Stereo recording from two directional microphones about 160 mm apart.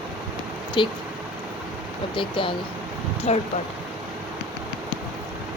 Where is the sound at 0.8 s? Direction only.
30° left (ahead or behind).